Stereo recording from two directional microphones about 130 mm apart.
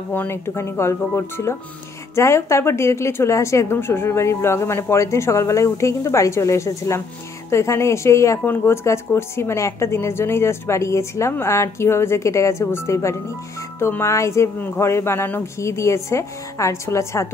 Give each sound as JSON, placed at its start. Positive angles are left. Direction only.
{"t": 0.1, "sound": "speech", "side_deg": 15}